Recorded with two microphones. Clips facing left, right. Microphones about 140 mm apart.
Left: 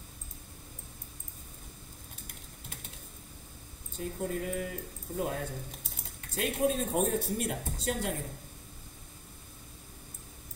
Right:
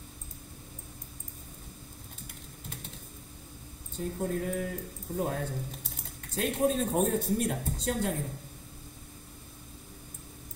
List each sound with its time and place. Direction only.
4.0 s speech: 45° right (ahead or behind)